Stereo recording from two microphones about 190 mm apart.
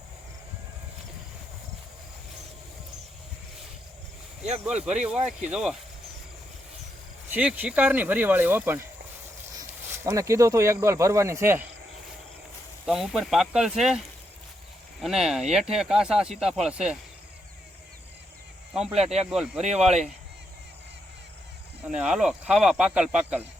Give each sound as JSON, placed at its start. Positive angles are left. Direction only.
{"t": 4.6, "sound": "speech", "side_deg": -5}
{"t": 7.3, "sound": "speech", "side_deg": -10}
{"t": 12.8, "sound": "speech", "side_deg": 0}
{"t": 15.0, "sound": "speech", "side_deg": 0}
{"t": 18.8, "sound": "speech", "side_deg": -35}
{"t": 19.3, "sound": "speech", "side_deg": -5}
{"t": 21.9, "sound": "speech", "side_deg": -5}